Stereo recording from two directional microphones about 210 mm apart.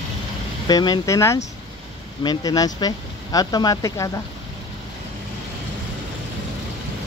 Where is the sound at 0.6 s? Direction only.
20° left (ahead or behind).